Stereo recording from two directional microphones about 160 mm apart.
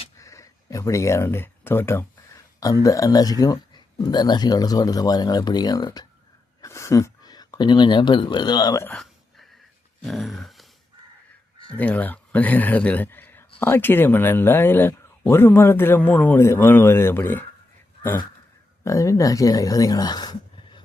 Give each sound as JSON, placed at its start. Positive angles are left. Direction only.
{"t": 0.2, "sound": "speech", "side_deg": 20}
{"t": 8.9, "sound": "a sound", "side_deg": 0}
{"t": 11.8, "sound": "speech", "side_deg": 10}
{"t": 18.9, "sound": "speech", "side_deg": 20}